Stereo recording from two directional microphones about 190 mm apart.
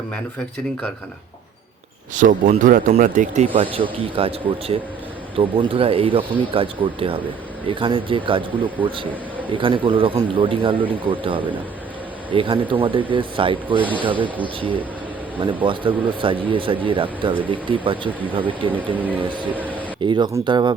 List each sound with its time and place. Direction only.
2.1 s speech: 40° right (ahead or behind)
3.5 s speech: 25° right (ahead or behind)
9.5 s speech: 25° right (ahead or behind)